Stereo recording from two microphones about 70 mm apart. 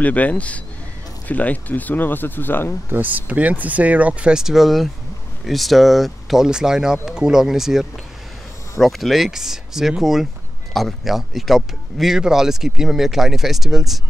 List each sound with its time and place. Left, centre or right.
0.0 s speech: left
2.9 s speech: right; by 7.8 s centre
8.8 s speech: centre